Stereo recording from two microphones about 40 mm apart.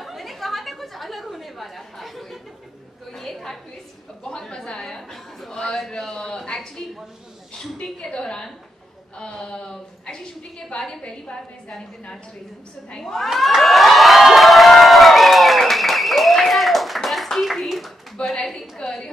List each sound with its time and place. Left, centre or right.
0.0 s a sound: centre
4.2 s a man's voice: centre
8.1 s a woman's voice: left
10.7 s a woman's voice: left
12.9 s a man's voice: centre
13.3 s crowd: centre
18.1 s a sound: centre